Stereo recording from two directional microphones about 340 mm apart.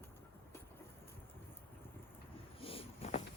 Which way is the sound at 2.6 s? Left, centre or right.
Centre.